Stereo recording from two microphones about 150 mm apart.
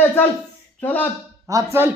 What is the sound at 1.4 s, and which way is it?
Speech, 20° right (ahead or behind).